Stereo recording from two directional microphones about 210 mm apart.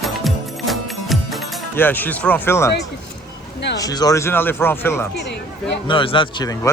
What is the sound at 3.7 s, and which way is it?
Speech, 15° left (ahead or behind).